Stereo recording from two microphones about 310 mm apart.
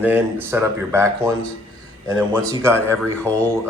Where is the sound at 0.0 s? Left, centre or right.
Centre.